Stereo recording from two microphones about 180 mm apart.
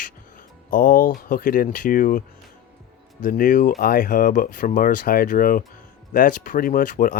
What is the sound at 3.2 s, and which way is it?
Speech, 50° left (ahead or behind).